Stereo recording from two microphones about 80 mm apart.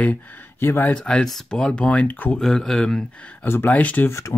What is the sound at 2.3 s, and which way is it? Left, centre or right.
Speech, centre.